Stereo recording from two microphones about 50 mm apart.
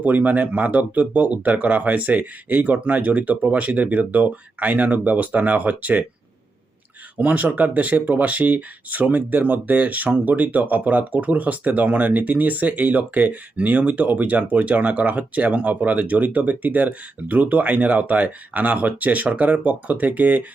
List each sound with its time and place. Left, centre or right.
0.0 s speech: right
7.2 s speech: right